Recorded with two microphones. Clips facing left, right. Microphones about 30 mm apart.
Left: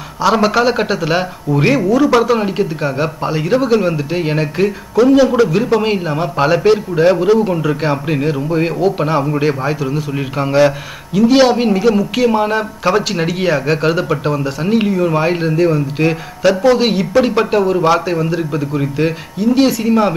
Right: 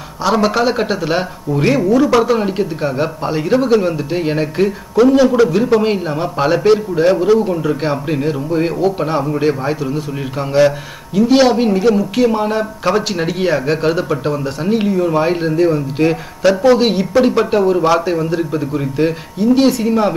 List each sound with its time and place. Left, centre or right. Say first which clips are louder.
0.2 s a man's voice: left 2 dB; centre
4.9 s a man's voice: even; centre
7.4 s a man's voice: left 1 dB; left
12.9 s a man's voice: left 2 dB; centre